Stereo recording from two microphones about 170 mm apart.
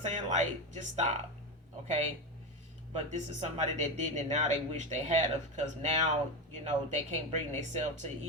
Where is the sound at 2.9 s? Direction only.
45° right (ahead or behind).